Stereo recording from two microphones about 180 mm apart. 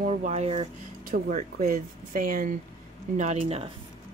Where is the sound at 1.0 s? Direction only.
50° right (ahead or behind).